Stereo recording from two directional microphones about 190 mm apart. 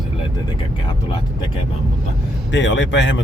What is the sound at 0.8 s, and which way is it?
Speech, 25° left (ahead or behind).